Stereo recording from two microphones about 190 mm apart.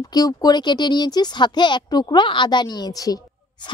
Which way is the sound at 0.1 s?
20° left (ahead or behind).